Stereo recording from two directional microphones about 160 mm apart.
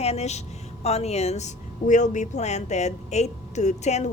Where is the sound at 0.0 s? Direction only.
40° left (ahead or behind).